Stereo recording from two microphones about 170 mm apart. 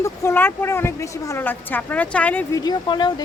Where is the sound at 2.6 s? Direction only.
25° left (ahead or behind).